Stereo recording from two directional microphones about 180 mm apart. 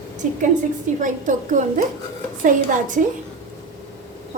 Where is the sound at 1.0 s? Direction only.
45° right (ahead or behind).